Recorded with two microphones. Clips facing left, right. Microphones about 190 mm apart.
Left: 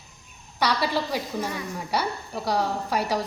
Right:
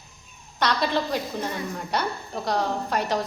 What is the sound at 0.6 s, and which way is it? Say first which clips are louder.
A woman's voice: right 1 dB; 10° left (ahead or behind).